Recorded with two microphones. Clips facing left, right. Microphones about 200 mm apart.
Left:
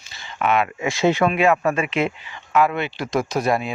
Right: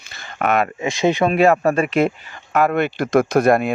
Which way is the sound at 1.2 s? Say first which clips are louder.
Right 6 dB; 40° right (ahead or behind).